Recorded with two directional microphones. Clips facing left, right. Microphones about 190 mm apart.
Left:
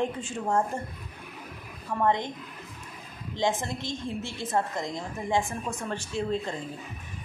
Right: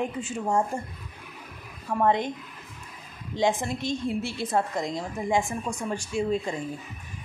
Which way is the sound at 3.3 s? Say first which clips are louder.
Right 3 dB; 15° right (ahead or behind).